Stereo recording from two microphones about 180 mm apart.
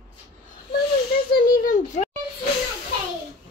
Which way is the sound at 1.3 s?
50° left (ahead or behind).